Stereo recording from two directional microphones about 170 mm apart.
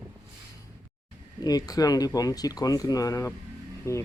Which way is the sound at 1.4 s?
20° left (ahead or behind).